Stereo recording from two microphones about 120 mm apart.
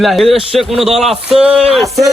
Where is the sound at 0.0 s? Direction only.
Centre (ahead or behind).